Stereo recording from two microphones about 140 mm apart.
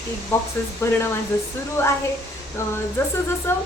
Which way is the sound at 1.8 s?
20° left (ahead or behind).